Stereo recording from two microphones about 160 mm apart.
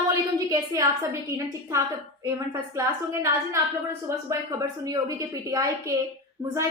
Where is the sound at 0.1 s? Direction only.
20° right (ahead or behind).